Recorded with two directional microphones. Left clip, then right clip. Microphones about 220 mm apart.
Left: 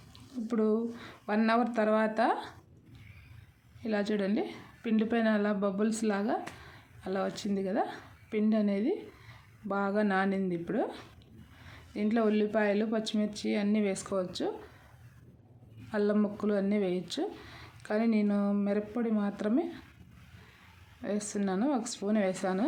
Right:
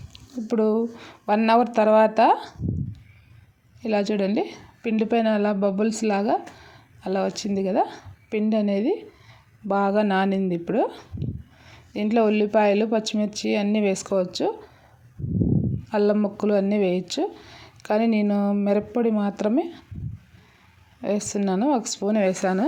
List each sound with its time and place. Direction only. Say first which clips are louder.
0.1 s speech: right 9 dB; 30° right (ahead or behind)
3.8 s a woman's voice: right 8 dB; 25° right (ahead or behind)
15.9 s a woman's voice: right 8 dB; 30° right (ahead or behind)
21.0 s a woman's voice: right 9 dB; 30° right (ahead or behind)